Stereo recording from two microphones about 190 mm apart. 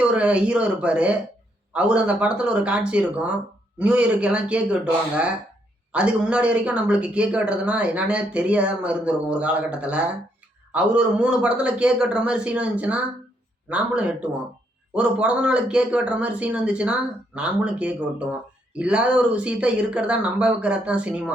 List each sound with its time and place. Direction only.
0.0 s speech: 5° right (ahead or behind)